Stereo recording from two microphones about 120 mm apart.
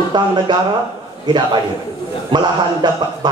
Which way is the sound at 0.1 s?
40° right (ahead or behind).